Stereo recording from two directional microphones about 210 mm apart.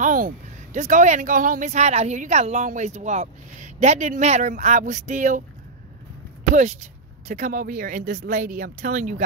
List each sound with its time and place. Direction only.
0.0 s a sound: 40° right (ahead or behind)
0.7 s speech: 35° right (ahead or behind)
6.5 s speech: 35° right (ahead or behind)